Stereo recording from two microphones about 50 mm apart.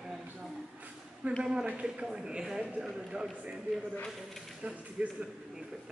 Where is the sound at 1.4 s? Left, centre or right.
Centre.